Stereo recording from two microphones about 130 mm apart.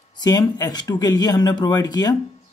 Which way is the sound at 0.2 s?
30° left (ahead or behind).